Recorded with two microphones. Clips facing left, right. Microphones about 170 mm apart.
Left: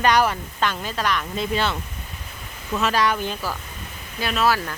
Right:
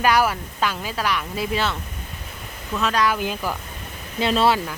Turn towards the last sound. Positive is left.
turn(degrees=-25)  # may be behind; listen again after turning